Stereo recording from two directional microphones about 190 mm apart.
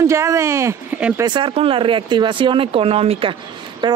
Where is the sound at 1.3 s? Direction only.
25° right (ahead or behind).